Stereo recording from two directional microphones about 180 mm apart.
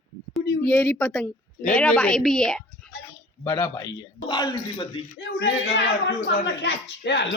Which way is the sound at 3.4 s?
20° left (ahead or behind).